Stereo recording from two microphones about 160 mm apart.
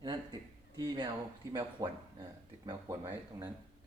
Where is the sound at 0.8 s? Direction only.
25° right (ahead or behind).